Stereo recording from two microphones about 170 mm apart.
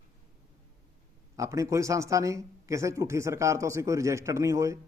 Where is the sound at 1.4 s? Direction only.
20° right (ahead or behind).